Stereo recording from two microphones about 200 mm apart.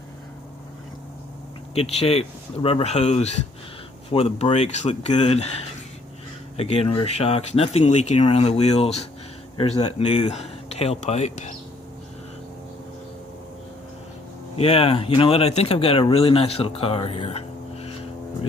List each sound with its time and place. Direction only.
1.7 s speech: 30° left (ahead or behind)
6.6 s speech: 30° left (ahead or behind)
14.5 s speech: 30° left (ahead or behind)